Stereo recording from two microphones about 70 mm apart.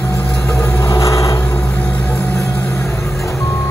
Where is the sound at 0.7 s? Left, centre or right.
Left.